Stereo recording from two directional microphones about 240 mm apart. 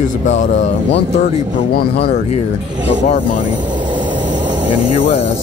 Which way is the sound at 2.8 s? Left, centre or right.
Left.